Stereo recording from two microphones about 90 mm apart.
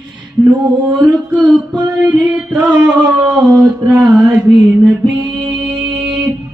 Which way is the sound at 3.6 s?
15° right (ahead or behind).